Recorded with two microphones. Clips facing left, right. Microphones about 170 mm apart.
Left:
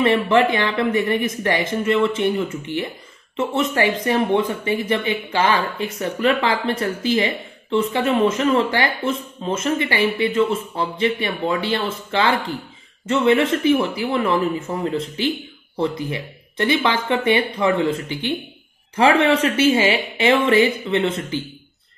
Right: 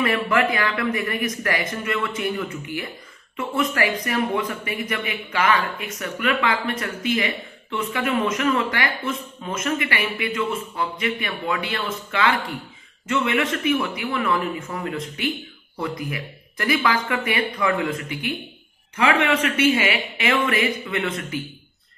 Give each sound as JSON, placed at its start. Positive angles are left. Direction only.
{"t": 0.0, "sound": "speech", "side_deg": 25}